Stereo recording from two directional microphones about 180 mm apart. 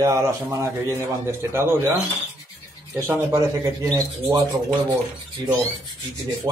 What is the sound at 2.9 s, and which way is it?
A man's voice, 15° right (ahead or behind).